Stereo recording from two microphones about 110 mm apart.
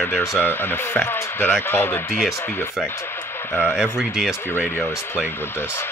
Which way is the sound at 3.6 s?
5° right (ahead or behind).